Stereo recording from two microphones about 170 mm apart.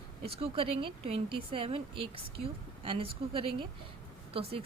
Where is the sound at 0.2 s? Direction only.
35° right (ahead or behind).